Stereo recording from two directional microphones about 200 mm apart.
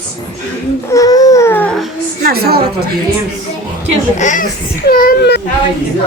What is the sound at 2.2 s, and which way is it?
Speech, 50° right (ahead or behind).